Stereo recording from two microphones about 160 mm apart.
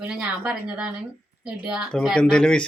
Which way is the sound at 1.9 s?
5° left (ahead or behind).